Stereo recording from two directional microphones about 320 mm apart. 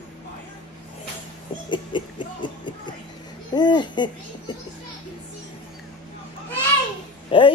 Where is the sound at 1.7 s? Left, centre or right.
Centre.